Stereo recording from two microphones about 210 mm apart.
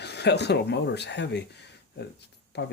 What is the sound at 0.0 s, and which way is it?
Speech, 55° left (ahead or behind).